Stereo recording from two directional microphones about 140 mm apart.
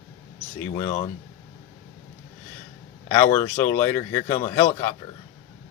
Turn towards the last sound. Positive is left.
turn(degrees=20)  # may be behind; listen again after turning